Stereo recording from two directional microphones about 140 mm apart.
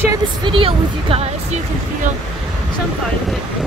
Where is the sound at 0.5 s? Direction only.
40° right (ahead or behind).